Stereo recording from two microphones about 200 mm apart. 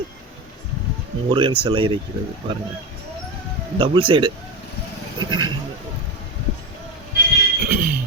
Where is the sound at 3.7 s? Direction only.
25° right (ahead or behind).